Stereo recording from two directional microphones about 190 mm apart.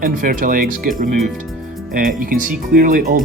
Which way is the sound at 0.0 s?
45° right (ahead or behind).